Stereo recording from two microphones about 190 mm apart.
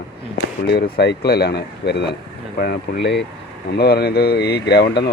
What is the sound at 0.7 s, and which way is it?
Speech, 60° left (ahead or behind).